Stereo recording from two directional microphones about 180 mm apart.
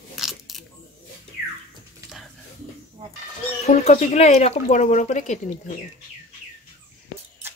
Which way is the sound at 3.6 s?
35° left (ahead or behind).